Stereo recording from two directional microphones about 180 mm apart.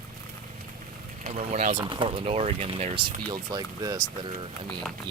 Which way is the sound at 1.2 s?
35° right (ahead or behind).